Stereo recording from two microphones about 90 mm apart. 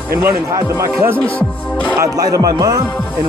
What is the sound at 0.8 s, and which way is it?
Speech, 25° right (ahead or behind).